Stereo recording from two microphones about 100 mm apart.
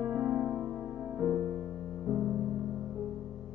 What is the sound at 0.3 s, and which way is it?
Music, centre (ahead or behind).